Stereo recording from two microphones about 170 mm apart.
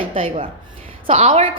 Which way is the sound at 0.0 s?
30° right (ahead or behind).